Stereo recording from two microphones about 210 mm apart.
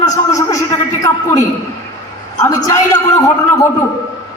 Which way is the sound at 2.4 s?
15° left (ahead or behind).